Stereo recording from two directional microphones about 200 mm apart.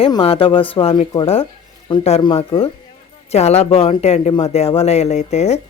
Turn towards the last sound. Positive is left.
turn(degrees=35)  # may be behind; listen again after turning